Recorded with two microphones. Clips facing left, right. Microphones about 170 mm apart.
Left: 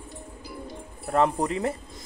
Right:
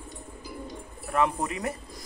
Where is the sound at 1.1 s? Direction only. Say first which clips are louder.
Left 3 dB; 35° left (ahead or behind).